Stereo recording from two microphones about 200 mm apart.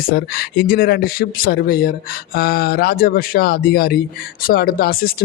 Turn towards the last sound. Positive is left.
turn(degrees=50)  # may be behind; listen again after turning